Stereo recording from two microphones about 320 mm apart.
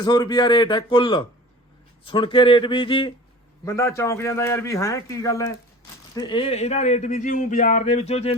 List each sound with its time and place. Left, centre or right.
0.0 s a man's voice: centre